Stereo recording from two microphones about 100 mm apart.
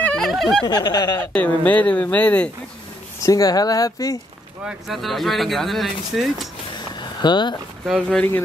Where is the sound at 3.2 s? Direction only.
35° left (ahead or behind).